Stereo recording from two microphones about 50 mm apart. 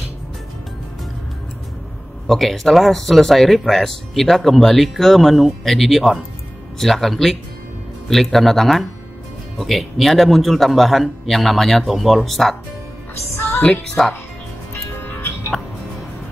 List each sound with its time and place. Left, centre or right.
2.2 s speech: centre
13.6 s a woman's voice: centre
14.7 s music: left